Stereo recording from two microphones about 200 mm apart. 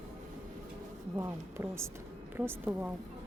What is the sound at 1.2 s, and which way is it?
A woman's voice, 15° right (ahead or behind).